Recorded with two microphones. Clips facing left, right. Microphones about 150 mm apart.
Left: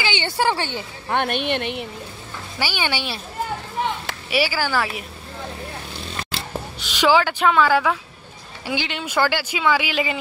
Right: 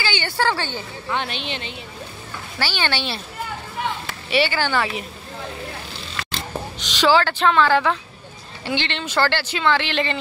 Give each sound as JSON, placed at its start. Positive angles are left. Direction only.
{"t": 0.0, "sound": "speech", "side_deg": 20}
{"t": 1.1, "sound": "speech", "side_deg": 55}
{"t": 2.6, "sound": "speech", "side_deg": 10}
{"t": 4.3, "sound": "speech", "side_deg": 5}
{"t": 6.3, "sound": "speech", "side_deg": 10}